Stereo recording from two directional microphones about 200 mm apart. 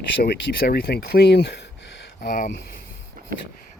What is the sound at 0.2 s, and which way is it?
Speech, 50° left (ahead or behind).